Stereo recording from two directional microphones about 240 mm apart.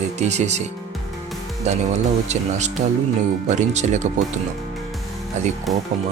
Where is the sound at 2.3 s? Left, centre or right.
Right.